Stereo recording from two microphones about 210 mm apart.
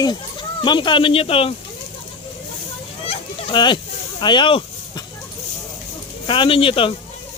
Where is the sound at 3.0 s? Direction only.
25° left (ahead or behind).